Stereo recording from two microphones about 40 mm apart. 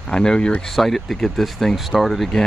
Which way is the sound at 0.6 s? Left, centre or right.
Centre.